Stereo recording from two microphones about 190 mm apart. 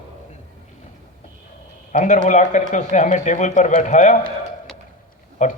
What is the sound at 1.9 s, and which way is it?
A man's voice, 40° left (ahead or behind).